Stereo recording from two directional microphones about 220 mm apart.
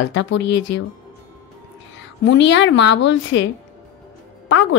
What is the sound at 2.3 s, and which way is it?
Speech, 55° left (ahead or behind).